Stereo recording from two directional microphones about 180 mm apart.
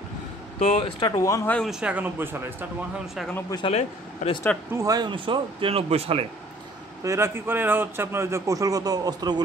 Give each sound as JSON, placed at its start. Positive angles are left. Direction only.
{"t": 0.6, "sound": "speech", "side_deg": 30}
{"t": 1.7, "sound": "a man's voice", "side_deg": -5}
{"t": 3.3, "sound": "speech", "side_deg": 20}
{"t": 3.6, "sound": "speech", "side_deg": 35}
{"t": 4.7, "sound": "speech", "side_deg": -20}
{"t": 7.0, "sound": "a man's voice", "side_deg": -15}